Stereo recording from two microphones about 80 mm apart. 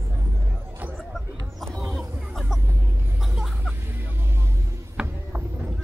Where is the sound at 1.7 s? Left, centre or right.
Right.